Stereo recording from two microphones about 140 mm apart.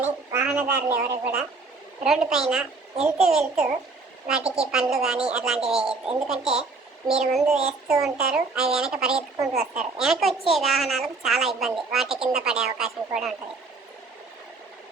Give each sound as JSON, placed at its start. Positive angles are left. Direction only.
{"t": 0.0, "sound": "speech", "side_deg": -15}
{"t": 1.2, "sound": "a woman's voice", "side_deg": -5}